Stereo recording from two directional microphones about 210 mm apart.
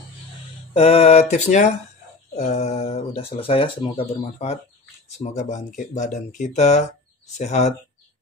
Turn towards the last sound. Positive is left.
turn(degrees=35)  # may be behind; listen again after turning